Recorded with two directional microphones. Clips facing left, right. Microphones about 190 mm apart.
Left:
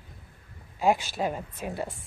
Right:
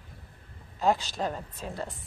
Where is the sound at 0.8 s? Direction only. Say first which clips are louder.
Left 2 dB; 15° left (ahead or behind).